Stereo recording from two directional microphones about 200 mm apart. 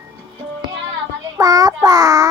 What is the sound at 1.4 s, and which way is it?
Child singing, 20° right (ahead or behind).